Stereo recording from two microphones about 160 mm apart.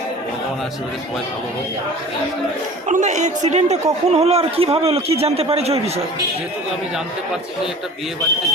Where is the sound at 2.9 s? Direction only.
50° right (ahead or behind).